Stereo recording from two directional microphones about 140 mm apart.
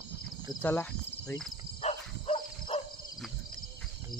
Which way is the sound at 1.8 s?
50° left (ahead or behind).